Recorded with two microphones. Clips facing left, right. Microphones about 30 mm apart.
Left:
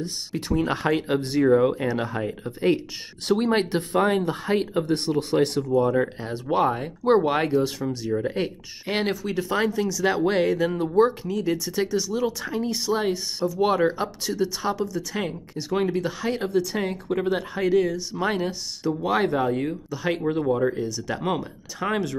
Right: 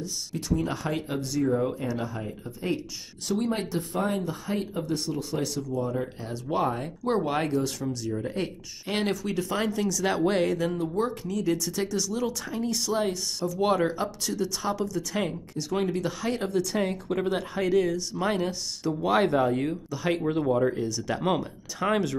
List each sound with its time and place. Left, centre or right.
0.0 s speech: left
6.2 s speech: left; by 10.8 s centre
10.8 s speech: left; by 15.3 s centre
15.5 s speech: centre